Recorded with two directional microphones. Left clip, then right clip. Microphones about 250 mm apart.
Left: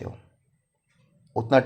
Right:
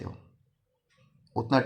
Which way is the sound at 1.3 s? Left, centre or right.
Centre.